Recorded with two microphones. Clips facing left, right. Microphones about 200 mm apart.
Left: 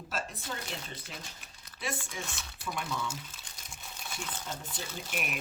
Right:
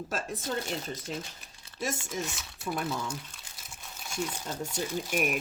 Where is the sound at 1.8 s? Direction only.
45° right (ahead or behind).